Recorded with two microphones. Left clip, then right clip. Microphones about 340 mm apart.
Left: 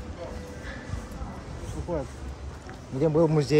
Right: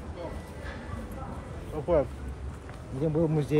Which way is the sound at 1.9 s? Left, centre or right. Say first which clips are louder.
Right 7 dB; right.